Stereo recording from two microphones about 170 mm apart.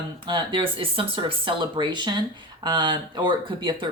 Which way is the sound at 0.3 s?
30° right (ahead or behind).